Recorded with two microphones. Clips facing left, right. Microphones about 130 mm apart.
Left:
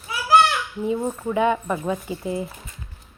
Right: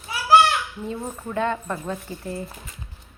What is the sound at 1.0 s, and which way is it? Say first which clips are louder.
A woman's voice: left 3 dB; 15° left (ahead or behind).